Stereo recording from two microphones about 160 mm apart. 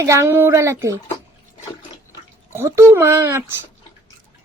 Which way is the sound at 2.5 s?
15° right (ahead or behind).